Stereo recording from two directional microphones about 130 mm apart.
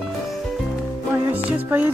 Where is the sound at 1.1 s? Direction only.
15° right (ahead or behind).